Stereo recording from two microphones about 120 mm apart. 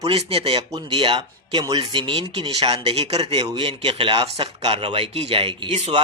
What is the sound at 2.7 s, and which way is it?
A man's voice, 60° right (ahead or behind).